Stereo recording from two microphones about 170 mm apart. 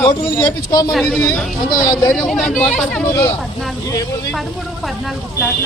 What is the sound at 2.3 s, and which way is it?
Speech, 5° left (ahead or behind).